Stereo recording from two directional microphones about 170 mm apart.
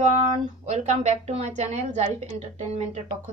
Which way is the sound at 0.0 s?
40° right (ahead or behind).